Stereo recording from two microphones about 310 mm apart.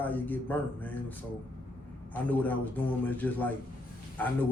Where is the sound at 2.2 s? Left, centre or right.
Centre.